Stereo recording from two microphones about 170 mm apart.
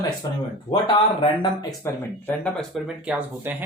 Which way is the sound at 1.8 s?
10° left (ahead or behind).